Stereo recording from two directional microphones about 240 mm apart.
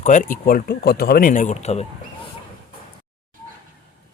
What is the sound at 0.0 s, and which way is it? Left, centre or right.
Speech, left.